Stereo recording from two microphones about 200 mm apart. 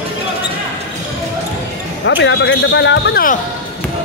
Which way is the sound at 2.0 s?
65° left (ahead or behind).